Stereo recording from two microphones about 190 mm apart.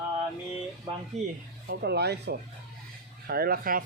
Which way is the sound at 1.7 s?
60° right (ahead or behind).